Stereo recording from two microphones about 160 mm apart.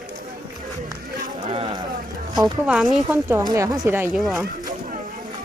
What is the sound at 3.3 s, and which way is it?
Speech, 20° right (ahead or behind).